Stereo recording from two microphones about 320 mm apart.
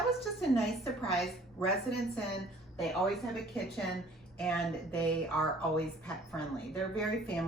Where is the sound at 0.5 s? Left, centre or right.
Centre.